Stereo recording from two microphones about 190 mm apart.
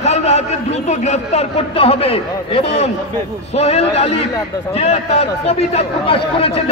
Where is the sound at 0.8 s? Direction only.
35° left (ahead or behind).